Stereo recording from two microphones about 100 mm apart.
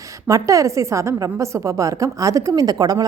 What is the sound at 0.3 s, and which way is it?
A woman's voice, 35° right (ahead or behind).